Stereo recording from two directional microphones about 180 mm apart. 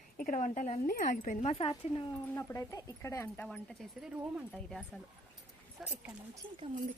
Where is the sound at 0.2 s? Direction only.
45° left (ahead or behind).